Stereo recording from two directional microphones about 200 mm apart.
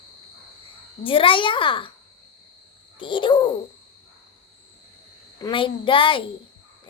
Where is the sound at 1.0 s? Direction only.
25° left (ahead or behind).